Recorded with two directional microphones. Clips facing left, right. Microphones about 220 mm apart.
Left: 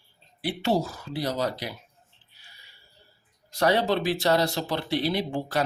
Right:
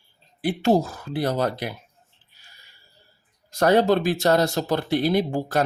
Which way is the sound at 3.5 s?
45° right (ahead or behind).